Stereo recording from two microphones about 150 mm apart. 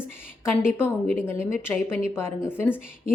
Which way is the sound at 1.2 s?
15° left (ahead or behind).